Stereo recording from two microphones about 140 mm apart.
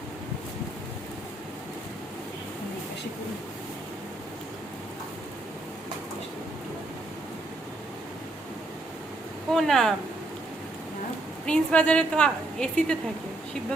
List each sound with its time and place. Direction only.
9.5 s speech: centre (ahead or behind)
11.4 s a woman's voice: 5° left (ahead or behind)